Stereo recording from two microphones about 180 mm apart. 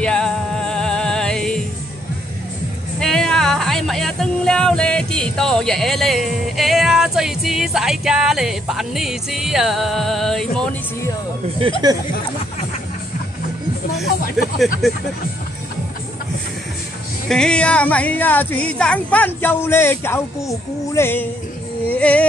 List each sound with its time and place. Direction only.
0.0 s music: 5° left (ahead or behind)
3.0 s music: 5° left (ahead or behind)
11.8 s speech: 25° right (ahead or behind)
14.4 s a sound: centre (ahead or behind)
14.8 s speech: centre (ahead or behind)
17.3 s a woman's voice: 5° left (ahead or behind)